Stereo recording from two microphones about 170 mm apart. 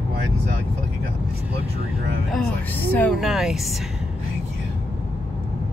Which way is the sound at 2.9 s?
5° left (ahead or behind).